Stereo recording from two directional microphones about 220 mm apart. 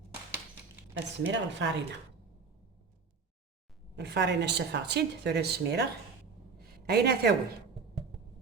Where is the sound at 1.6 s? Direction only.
55° right (ahead or behind).